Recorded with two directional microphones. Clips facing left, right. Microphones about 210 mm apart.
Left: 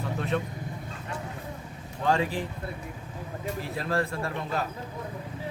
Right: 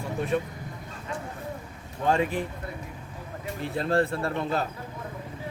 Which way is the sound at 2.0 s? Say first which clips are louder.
Right 1 dB; 20° right (ahead or behind).